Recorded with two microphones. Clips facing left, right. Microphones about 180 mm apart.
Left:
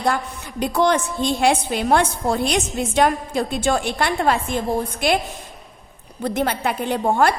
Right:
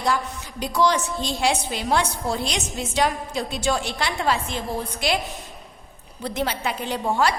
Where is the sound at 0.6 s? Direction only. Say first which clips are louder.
Left 3 dB; 55° left (ahead or behind).